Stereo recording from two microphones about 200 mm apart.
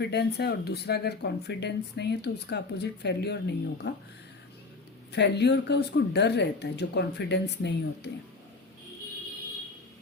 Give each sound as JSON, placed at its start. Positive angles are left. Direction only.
{"t": 0.0, "sound": "speech", "side_deg": 55}
{"t": 5.1, "sound": "speech", "side_deg": 60}